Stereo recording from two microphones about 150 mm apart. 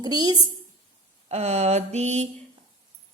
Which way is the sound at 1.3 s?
45° right (ahead or behind).